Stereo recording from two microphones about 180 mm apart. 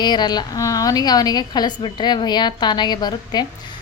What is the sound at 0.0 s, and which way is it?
A woman's voice, 25° left (ahead or behind).